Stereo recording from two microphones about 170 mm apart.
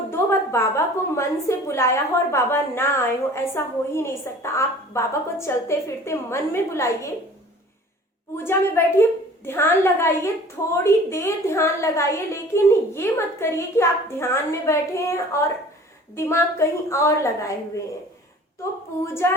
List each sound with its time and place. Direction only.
0.1 s a woman's voice: 15° left (ahead or behind)
8.4 s a woman's voice: 15° left (ahead or behind)
19.0 s a woman's voice: 15° left (ahead or behind)